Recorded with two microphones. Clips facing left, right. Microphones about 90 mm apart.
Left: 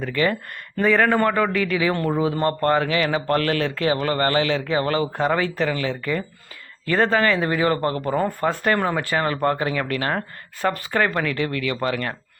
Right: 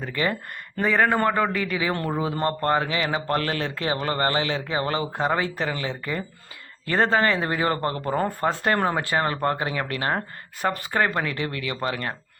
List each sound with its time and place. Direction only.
0.0 s speech: 25° right (ahead or behind)